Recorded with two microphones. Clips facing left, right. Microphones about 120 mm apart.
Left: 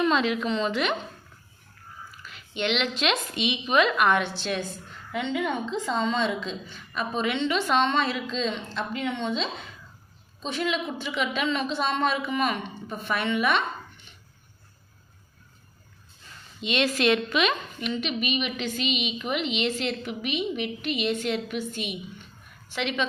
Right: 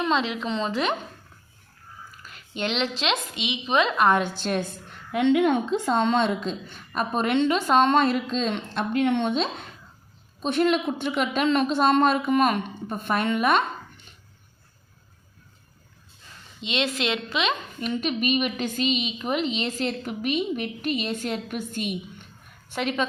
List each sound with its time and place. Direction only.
0.1 s a woman's voice: 25° right (ahead or behind)
2.2 s a sound: 45° right (ahead or behind)
2.6 s a woman's voice: 35° right (ahead or behind)
5.1 s a woman's voice: 65° right (ahead or behind); by 13.7 s 45° right (ahead or behind)
16.6 s a woman's voice: 20° right (ahead or behind)
17.7 s a woman's voice: 40° right (ahead or behind)